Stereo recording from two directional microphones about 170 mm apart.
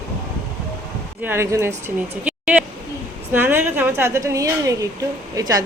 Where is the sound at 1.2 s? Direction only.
15° right (ahead or behind).